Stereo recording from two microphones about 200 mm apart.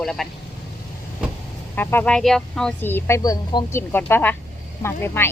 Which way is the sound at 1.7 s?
10° left (ahead or behind).